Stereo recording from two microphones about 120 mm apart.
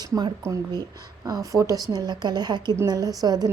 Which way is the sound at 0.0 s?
35° right (ahead or behind).